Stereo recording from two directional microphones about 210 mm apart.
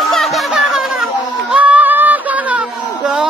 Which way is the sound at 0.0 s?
Centre (ahead or behind).